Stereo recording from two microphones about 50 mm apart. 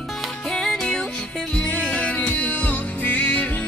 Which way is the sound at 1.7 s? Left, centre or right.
Left.